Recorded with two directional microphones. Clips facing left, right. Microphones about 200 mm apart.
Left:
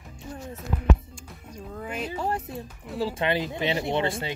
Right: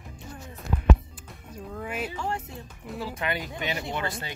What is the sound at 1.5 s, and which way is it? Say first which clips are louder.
Music: even; centre (ahead or behind).